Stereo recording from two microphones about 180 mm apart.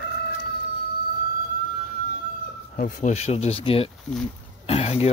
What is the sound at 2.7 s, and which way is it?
Speech, 45° left (ahead or behind).